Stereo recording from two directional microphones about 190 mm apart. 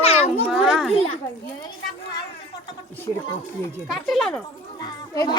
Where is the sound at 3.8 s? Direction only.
Centre (ahead or behind).